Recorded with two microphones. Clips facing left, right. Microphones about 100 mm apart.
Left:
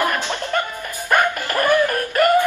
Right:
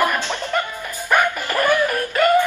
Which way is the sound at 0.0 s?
15° left (ahead or behind).